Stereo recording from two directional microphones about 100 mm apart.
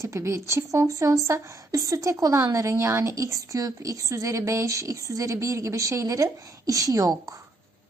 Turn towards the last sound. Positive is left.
turn(degrees=-35)  # may be behind; listen again after turning